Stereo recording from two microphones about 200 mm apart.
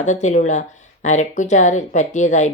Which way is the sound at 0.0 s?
35° left (ahead or behind).